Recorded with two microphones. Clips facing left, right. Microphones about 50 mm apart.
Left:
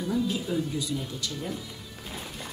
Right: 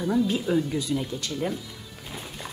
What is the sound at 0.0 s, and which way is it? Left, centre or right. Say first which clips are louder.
Speech: right 4 dB; right.